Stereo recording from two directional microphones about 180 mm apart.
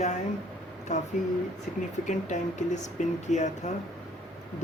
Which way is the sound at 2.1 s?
40° left (ahead or behind).